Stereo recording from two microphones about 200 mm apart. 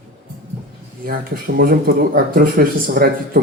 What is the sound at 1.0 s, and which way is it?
Speech, 50° right (ahead or behind).